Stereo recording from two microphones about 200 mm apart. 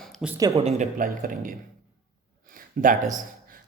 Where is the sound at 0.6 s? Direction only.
35° right (ahead or behind).